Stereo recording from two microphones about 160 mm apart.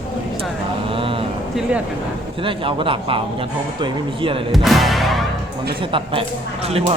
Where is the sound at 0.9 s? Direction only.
35° right (ahead or behind).